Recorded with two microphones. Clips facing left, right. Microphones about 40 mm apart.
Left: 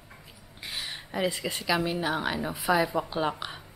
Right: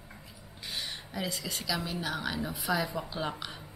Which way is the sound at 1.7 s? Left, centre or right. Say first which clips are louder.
Left 8 dB; left.